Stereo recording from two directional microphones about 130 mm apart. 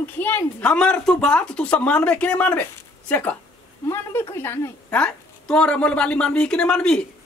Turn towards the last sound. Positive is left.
turn(degrees=5)  # may be behind; listen again after turning